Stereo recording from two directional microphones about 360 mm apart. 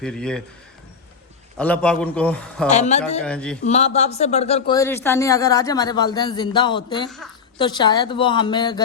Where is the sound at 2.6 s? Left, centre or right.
Centre.